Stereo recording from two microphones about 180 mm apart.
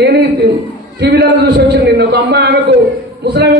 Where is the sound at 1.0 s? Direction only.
70° right (ahead or behind).